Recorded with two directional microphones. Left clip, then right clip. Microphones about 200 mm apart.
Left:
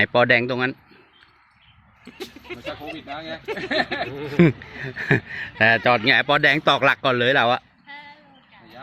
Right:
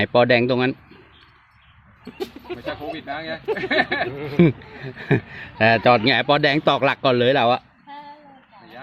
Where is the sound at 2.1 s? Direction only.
35° right (ahead or behind).